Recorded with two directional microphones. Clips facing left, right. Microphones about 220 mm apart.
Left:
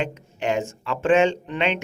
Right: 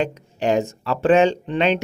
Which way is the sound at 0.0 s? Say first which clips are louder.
Right 4 dB; 35° right (ahead or behind).